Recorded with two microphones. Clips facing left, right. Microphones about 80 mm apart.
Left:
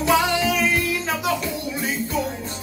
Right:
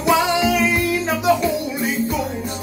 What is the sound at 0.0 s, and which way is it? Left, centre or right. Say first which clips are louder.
Music: right 3 dB; centre.